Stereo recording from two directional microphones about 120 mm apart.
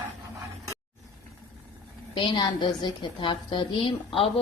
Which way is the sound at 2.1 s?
45° left (ahead or behind).